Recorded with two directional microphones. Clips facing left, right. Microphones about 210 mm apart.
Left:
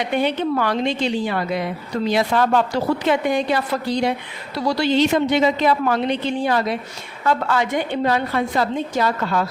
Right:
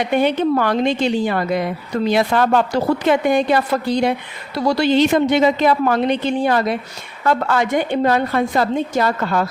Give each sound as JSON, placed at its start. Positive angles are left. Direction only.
{"t": 0.2, "sound": "a woman's voice", "side_deg": -50}
{"t": 2.0, "sound": "a woman's voice", "side_deg": -60}